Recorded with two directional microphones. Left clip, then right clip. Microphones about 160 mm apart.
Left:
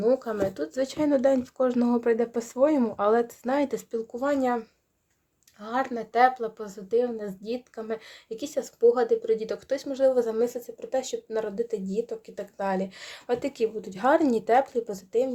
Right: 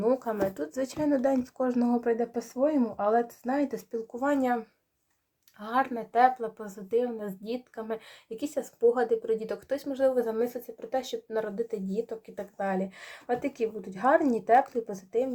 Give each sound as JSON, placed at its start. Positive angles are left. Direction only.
{"t": 0.0, "sound": "speech", "side_deg": 20}
{"t": 4.1, "sound": "a woman's voice", "side_deg": 20}
{"t": 6.7, "sound": "a woman's voice", "side_deg": 15}